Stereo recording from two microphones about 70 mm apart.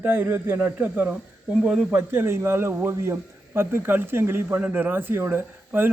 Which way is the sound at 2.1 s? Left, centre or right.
Right.